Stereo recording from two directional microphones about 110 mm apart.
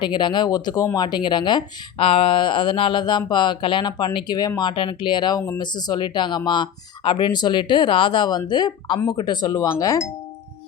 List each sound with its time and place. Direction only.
0.0 s speech: 45° left (ahead or behind)